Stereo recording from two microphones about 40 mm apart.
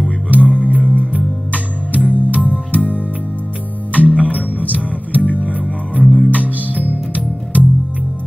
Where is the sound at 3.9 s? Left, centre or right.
Right.